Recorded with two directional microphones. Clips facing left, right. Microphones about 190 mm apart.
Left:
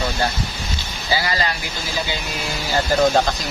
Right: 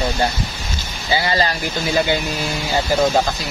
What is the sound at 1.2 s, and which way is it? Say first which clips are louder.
Speech: right 5 dB; 30° right (ahead or behind).